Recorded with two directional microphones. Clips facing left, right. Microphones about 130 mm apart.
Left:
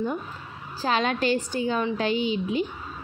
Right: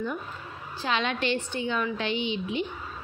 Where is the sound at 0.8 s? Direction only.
40° left (ahead or behind).